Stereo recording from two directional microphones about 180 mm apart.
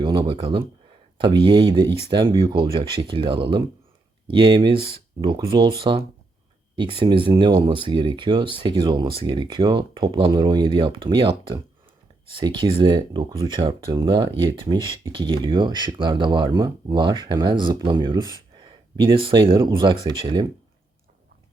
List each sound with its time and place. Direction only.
0.0 s speech: 25° right (ahead or behind)